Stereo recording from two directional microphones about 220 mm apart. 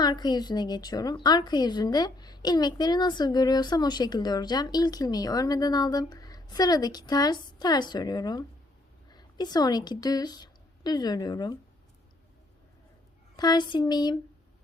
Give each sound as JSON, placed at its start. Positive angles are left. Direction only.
{"t": 0.0, "sound": "a woman's voice", "side_deg": 20}
{"t": 13.3, "sound": "a woman's voice", "side_deg": 20}